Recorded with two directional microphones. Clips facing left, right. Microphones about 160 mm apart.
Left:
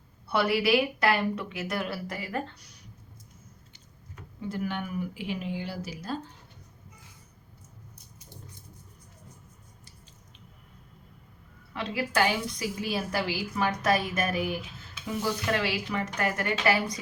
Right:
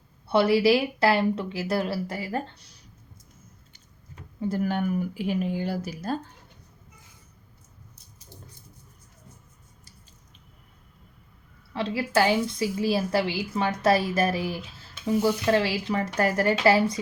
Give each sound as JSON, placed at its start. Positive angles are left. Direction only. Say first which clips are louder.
{"t": 0.3, "sound": "speech", "louder": "right 5 dB", "side_deg": -25}
{"t": 4.4, "sound": "speech", "louder": "right 6 dB", "side_deg": -40}
{"t": 11.7, "sound": "a woman's voice", "louder": "right 5 dB", "side_deg": -30}